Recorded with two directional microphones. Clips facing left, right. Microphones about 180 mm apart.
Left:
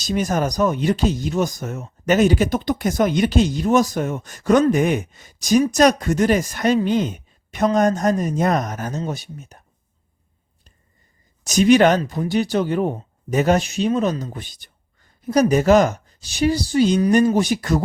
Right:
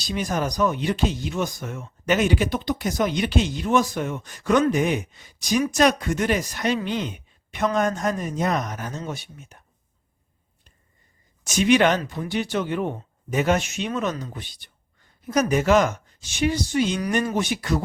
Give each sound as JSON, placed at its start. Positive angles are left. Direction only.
{"t": 0.0, "sound": "speech", "side_deg": 45}
{"t": 11.4, "sound": "speech", "side_deg": 40}